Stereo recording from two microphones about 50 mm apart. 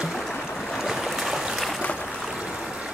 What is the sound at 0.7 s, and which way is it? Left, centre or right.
Stream, centre.